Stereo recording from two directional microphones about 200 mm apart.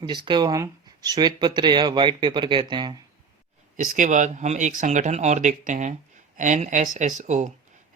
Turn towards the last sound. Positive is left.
turn(degrees=-35)  # may be behind; listen again after turning